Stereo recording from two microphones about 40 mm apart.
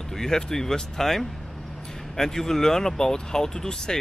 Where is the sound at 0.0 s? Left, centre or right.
Centre.